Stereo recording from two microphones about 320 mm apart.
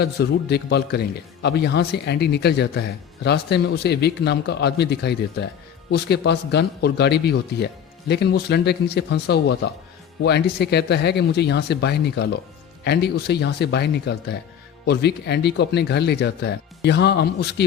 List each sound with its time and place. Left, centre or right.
0.0 s a man's voice: left